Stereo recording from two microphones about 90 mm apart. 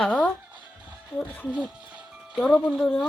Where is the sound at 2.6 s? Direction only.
10° right (ahead or behind).